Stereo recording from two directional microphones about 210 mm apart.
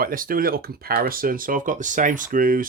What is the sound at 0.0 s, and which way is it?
Speech, 40° right (ahead or behind).